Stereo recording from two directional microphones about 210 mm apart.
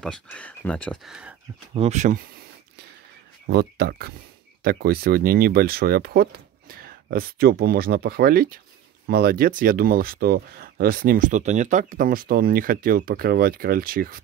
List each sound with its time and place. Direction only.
0.0 s speech: 5° left (ahead or behind)
1.8 s speech: 35° right (ahead or behind)
3.4 s speech: 50° right (ahead or behind)